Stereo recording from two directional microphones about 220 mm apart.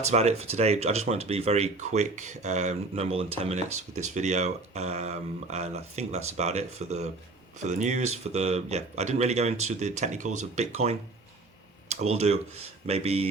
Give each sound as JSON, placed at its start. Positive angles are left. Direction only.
{"t": 0.0, "sound": "speech", "side_deg": -30}